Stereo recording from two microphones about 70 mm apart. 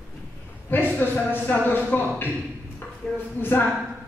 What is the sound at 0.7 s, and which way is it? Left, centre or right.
A man's voice, left.